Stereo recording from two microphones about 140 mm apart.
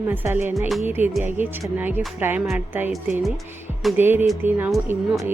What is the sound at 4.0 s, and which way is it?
A woman's voice, 15° right (ahead or behind).